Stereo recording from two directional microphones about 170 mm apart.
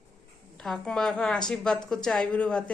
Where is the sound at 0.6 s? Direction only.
5° left (ahead or behind).